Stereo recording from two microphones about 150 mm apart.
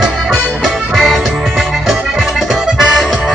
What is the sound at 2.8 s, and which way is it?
Music, 5° right (ahead or behind).